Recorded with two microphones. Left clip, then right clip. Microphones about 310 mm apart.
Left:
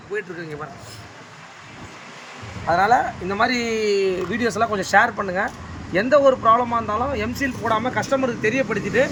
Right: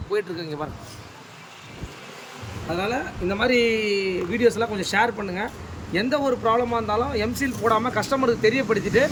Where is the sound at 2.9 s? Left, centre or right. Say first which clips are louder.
Left 8 dB; centre.